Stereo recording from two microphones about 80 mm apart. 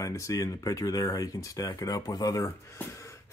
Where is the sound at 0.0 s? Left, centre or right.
Left.